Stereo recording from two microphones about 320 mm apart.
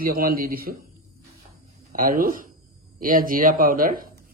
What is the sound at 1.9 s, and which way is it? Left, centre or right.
Speech, right.